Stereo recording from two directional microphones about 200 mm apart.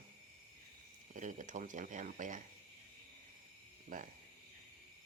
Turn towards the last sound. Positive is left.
turn(degrees=-45)  # may be behind; listen again after turning